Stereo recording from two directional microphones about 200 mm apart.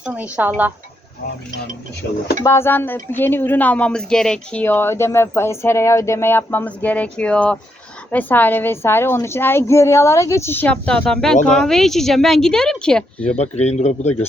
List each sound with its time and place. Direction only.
0.0 s speech: 5° right (ahead or behind)
2.0 s speech: 55° left (ahead or behind)
2.4 s speech: 15° left (ahead or behind)
13.3 s a man's voice: 35° left (ahead or behind)